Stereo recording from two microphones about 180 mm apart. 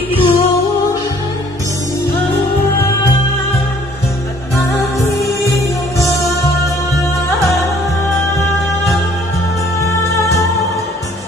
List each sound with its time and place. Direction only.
0.1 s music: 30° left (ahead or behind)
9.8 s music: 15° left (ahead or behind)